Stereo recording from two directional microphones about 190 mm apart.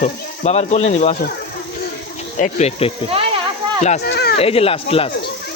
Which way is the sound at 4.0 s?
60° left (ahead or behind).